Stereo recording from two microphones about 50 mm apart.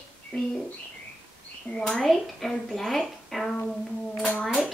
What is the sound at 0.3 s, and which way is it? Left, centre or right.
Speech, left.